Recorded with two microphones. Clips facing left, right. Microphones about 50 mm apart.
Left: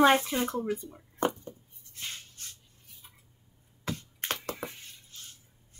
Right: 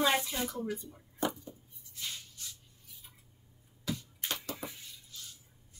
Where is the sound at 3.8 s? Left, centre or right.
Left.